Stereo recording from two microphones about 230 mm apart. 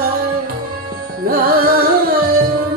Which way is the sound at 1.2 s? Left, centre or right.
Right.